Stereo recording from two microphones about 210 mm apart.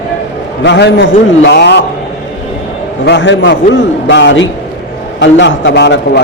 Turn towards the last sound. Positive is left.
turn(degrees=55)  # may be behind; listen again after turning